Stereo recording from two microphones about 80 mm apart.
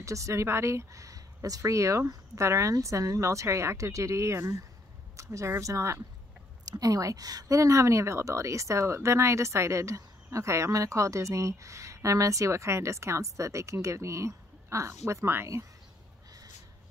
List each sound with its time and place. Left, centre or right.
0.0 s speech: right